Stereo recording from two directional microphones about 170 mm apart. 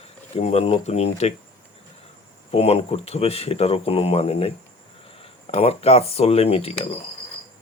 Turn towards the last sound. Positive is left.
turn(degrees=35)  # may be behind; listen again after turning